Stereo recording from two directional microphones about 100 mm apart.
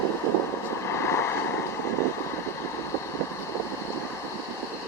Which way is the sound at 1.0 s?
25° left (ahead or behind).